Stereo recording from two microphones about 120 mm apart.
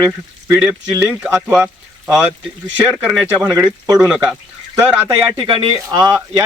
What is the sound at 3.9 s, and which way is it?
Speech, 5° right (ahead or behind).